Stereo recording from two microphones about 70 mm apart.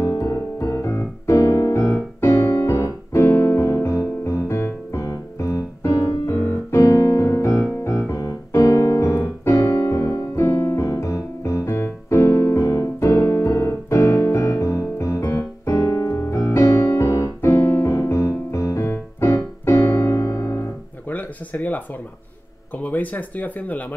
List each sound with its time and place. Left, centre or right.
0.0 s music: left
6.3 s piano: left
9.5 s piano: left
21.1 s speech: left